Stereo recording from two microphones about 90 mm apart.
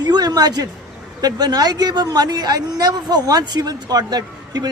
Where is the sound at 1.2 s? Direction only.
50° right (ahead or behind).